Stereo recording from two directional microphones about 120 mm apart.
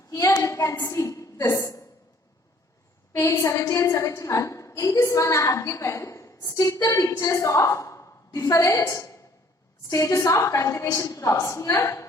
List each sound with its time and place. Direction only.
0.1 s a woman's voice: 25° left (ahead or behind)
3.1 s a woman's voice: 25° left (ahead or behind)